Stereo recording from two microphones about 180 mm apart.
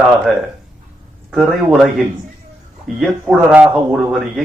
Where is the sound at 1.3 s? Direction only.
Centre (ahead or behind).